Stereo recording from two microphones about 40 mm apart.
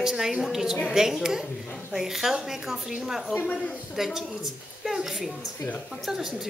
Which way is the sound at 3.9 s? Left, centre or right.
Centre.